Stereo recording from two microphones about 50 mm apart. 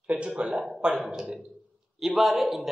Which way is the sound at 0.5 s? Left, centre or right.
Centre.